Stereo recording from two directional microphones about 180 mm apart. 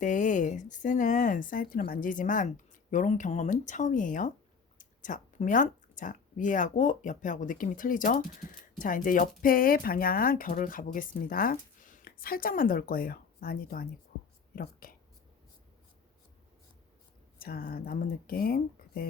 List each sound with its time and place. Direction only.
0.0 s speech: 45° left (ahead or behind)
17.4 s speech: 55° left (ahead or behind)